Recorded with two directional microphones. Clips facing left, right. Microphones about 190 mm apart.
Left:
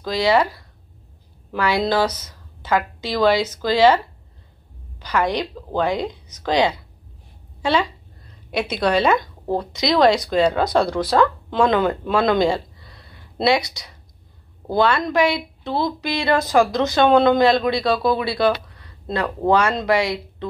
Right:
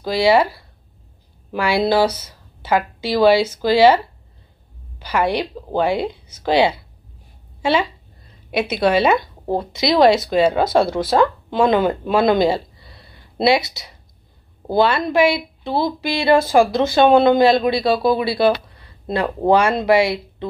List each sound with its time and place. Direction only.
0.0 s a woman's voice: 10° right (ahead or behind)
8.5 s a woman's voice: 5° right (ahead or behind)
10.9 s speech: 25° right (ahead or behind)
11.5 s speech: 10° right (ahead or behind)
12.0 s a sound: 10° right (ahead or behind)
14.7 s speech: 5° right (ahead or behind)